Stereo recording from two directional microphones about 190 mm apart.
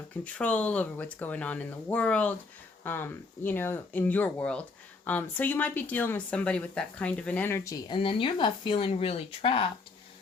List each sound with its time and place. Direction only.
0.3 s speech: 5° left (ahead or behind)
7.9 s speech: 30° left (ahead or behind)